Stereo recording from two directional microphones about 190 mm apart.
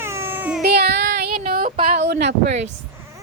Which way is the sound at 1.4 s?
50° right (ahead or behind).